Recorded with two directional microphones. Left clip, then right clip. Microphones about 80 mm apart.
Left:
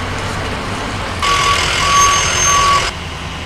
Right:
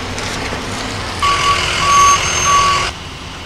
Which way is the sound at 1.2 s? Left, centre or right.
Centre.